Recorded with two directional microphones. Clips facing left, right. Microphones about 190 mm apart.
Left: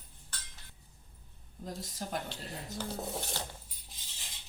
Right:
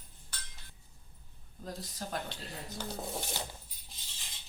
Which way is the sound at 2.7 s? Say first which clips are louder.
Left 1 dB; 5° left (ahead or behind).